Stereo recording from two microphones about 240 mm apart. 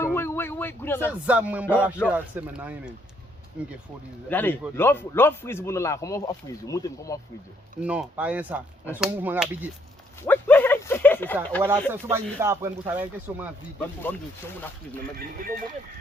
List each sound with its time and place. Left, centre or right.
0.0 s a sound: centre
1.3 s speech: centre
4.3 s speech: centre
7.8 s speech: centre
10.2 s dog: centre
11.9 s speech: centre
13.7 s speech: centre
15.4 s speech: right